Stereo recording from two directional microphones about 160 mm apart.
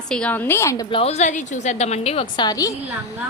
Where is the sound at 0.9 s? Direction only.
35° left (ahead or behind).